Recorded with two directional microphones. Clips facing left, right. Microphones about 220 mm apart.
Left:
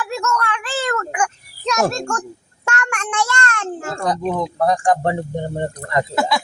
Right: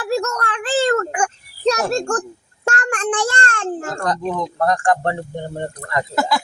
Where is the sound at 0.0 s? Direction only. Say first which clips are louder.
Right 2 dB; 35° right (ahead or behind).